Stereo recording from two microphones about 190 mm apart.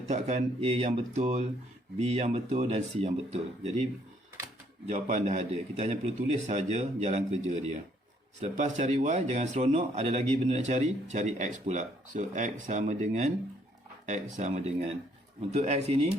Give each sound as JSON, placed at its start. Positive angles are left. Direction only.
{"t": 0.1, "sound": "a man's voice", "side_deg": -35}
{"t": 4.9, "sound": "a man's voice", "side_deg": -35}